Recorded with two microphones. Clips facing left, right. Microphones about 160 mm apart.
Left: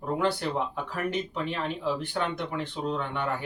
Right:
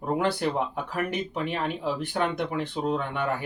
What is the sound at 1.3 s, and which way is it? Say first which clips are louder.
Speech: right 2 dB; 60° right (ahead or behind).